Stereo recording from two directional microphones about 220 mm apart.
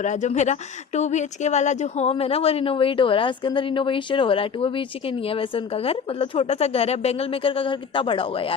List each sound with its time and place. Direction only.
0.0 s speech: 35° left (ahead or behind)